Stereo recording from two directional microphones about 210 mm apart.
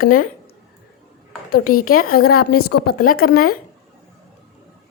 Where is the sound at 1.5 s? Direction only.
45° left (ahead or behind).